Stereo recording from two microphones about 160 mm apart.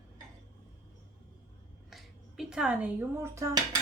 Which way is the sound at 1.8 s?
Centre (ahead or behind).